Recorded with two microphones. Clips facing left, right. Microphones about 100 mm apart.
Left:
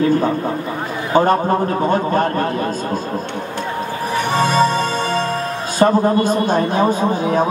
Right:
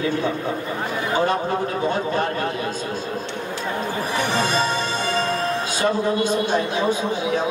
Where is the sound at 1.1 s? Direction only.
45° left (ahead or behind).